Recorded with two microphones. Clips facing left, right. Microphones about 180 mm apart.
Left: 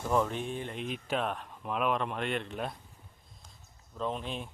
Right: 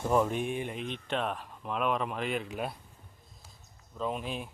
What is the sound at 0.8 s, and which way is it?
Speech, 5° left (ahead or behind).